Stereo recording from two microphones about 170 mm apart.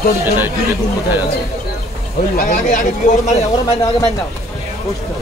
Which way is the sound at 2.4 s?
50° left (ahead or behind).